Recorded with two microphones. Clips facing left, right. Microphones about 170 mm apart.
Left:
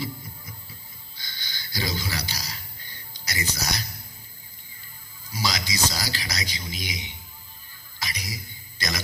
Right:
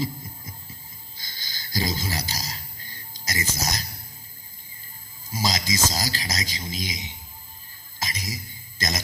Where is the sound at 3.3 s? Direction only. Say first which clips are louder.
Right 1 dB; 45° right (ahead or behind).